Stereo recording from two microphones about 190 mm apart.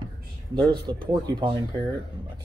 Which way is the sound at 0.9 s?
25° right (ahead or behind).